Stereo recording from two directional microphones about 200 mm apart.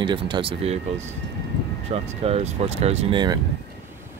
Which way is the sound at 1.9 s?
30° right (ahead or behind).